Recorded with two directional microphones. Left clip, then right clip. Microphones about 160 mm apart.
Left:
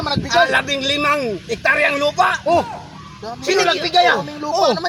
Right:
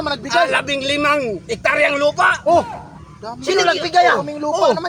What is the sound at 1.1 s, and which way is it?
Speech, 10° right (ahead or behind).